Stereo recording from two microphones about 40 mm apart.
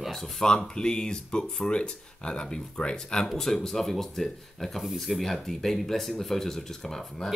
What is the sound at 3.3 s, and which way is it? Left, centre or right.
Speech, centre.